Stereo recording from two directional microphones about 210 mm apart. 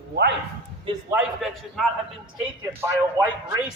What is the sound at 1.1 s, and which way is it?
Speech, centre (ahead or behind).